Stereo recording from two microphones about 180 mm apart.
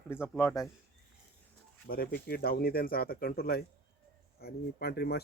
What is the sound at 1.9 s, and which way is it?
Speech, 55° left (ahead or behind).